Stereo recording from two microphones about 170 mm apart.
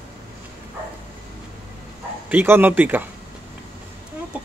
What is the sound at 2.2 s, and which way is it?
Speech, 10° right (ahead or behind).